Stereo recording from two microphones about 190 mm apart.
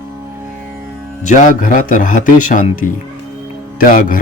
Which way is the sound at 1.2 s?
40° left (ahead or behind).